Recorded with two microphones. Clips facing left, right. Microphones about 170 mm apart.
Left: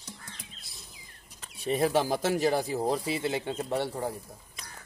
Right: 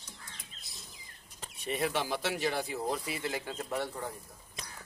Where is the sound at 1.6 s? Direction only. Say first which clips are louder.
Left 7 dB; 35° left (ahead or behind).